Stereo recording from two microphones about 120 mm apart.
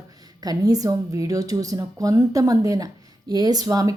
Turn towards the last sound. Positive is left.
turn(degrees=-30)  # may be behind; listen again after turning